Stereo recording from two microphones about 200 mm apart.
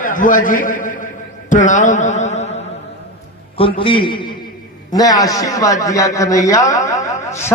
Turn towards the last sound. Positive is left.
turn(degrees=15)  # may be behind; listen again after turning